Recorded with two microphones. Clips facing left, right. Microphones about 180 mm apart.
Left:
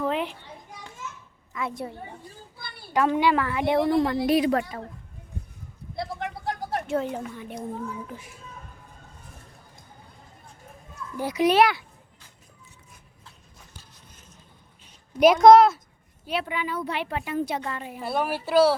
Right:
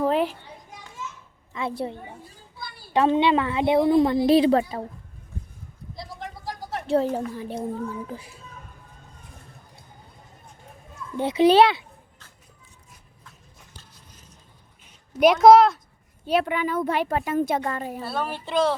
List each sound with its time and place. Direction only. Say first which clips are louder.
0.0 s children playing: right 5 dB; 40° right (ahead or behind)
1.0 s children playing: right 3 dB; 55° left (ahead or behind)
1.5 s a woman's voice: right 3 dB; 30° right (ahead or behind)
2.6 s a sound: right 6 dB; 65° left (ahead or behind)
2.9 s a woman's voice: right 2 dB; 25° right (ahead or behind)
6.0 s a sound: left 6 dB; 65° left (ahead or behind)
6.8 s a child's voice: right 8 dB; 35° right (ahead or behind)
11.2 s a woman's voice: right 4 dB; 25° right (ahead or behind)
15.2 s speech: even; centre (ahead or behind)
16.3 s a woman's voice: right 6 dB; 50° right (ahead or behind)
18.0 s speech: left 2 dB; 15° left (ahead or behind)